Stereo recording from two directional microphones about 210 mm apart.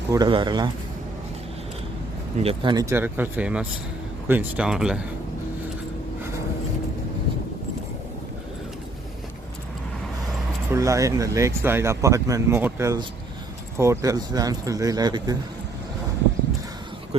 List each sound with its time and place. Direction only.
0.1 s speech: 20° right (ahead or behind)
2.4 s speech: 25° right (ahead or behind); by 5.0 s 5° right (ahead or behind)
10.7 s speech: 15° right (ahead or behind)